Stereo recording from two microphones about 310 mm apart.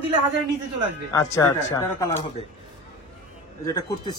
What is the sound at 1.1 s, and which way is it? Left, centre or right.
Speech, centre.